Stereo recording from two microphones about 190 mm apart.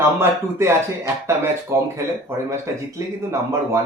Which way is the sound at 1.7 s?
15° right (ahead or behind).